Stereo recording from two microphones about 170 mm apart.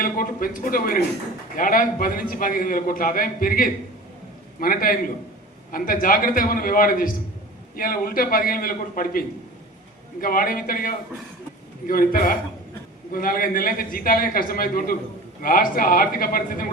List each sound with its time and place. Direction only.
0.0 s a man's voice: 55° left (ahead or behind)